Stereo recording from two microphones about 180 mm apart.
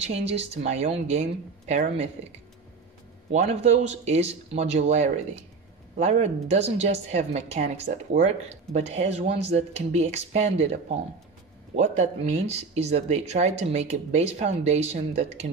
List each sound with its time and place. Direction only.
0.0 s a woman's voice: 35° right (ahead or behind)
3.3 s a woman's voice: 35° right (ahead or behind)
11.7 s a woman's voice: 35° right (ahead or behind)